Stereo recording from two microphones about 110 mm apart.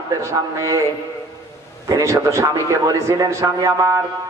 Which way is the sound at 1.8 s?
25° right (ahead or behind).